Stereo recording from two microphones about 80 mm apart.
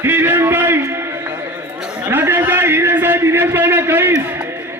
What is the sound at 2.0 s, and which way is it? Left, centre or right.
A man's voice, right.